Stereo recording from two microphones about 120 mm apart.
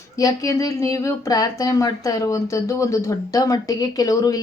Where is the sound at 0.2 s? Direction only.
30° left (ahead or behind).